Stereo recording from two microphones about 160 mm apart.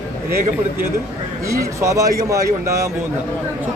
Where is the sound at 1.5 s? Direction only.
20° right (ahead or behind).